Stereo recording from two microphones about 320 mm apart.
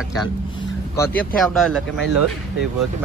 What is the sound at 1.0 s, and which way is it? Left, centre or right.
Speech, centre.